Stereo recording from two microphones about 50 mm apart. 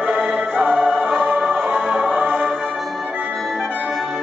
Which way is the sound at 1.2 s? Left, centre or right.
Right.